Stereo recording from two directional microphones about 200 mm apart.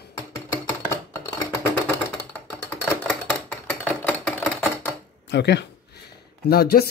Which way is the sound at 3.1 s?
5° left (ahead or behind).